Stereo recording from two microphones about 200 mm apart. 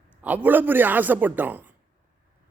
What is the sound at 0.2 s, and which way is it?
Speech, 10° right (ahead or behind).